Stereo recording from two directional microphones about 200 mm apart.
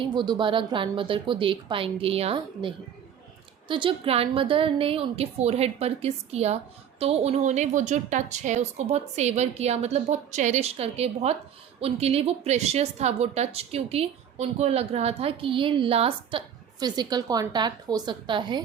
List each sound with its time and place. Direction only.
0.0 s a woman's voice: 20° right (ahead or behind)